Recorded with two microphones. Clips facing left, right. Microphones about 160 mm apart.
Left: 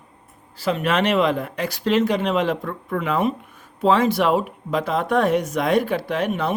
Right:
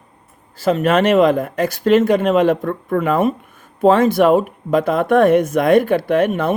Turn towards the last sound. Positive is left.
turn(degrees=-50)  # may be behind; listen again after turning